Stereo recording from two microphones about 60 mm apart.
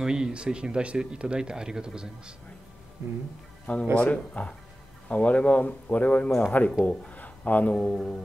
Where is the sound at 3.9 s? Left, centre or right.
Left.